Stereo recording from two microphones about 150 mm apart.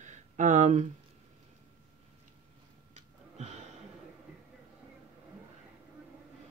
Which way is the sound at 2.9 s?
50° right (ahead or behind).